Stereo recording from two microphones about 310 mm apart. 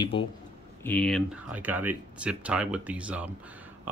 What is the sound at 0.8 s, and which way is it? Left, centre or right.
Speech, centre.